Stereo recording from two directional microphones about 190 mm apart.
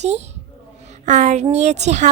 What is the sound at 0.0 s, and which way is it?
A woman's voice, 35° right (ahead or behind).